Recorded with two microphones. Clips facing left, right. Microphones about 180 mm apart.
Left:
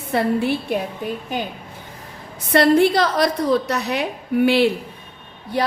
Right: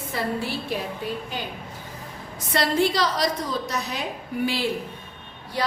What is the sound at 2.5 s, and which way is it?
A woman's voice, 60° left (ahead or behind).